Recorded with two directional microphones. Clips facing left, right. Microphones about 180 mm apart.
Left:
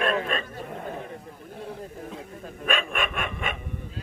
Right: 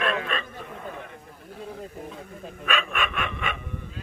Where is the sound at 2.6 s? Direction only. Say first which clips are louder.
Left 1 dB; 50° left (ahead or behind).